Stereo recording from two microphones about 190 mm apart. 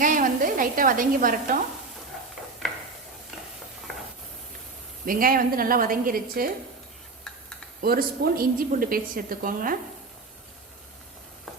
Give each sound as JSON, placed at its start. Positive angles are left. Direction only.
{"t": 0.0, "sound": "a sound", "side_deg": -45}
{"t": 5.0, "sound": "a woman's voice", "side_deg": -45}
{"t": 7.8, "sound": "a woman's voice", "side_deg": -50}